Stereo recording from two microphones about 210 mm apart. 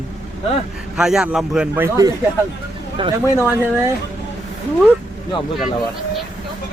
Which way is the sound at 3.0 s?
25° right (ahead or behind).